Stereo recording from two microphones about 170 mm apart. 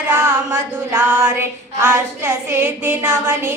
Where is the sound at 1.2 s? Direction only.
15° right (ahead or behind).